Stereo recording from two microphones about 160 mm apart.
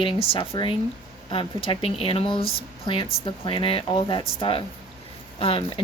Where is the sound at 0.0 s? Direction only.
35° left (ahead or behind).